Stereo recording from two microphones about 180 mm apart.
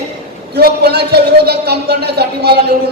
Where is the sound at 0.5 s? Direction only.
60° right (ahead or behind).